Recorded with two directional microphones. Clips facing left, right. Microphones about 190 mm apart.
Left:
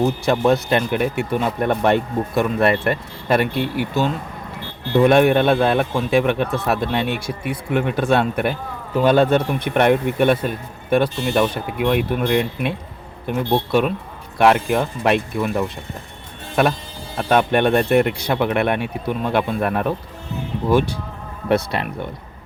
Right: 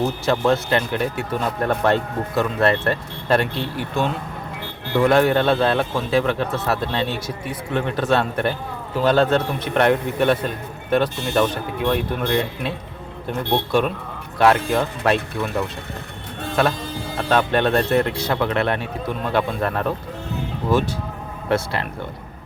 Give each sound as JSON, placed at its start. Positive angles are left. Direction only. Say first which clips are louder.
{"t": 0.3, "sound": "a man's voice", "louder": "left 1 dB", "side_deg": 15}
{"t": 4.9, "sound": "a man's voice", "louder": "left 3 dB", "side_deg": 20}
{"t": 17.2, "sound": "a man's voice", "louder": "left 3 dB", "side_deg": 15}
{"t": 21.5, "sound": "speech", "louder": "left 3 dB", "side_deg": 20}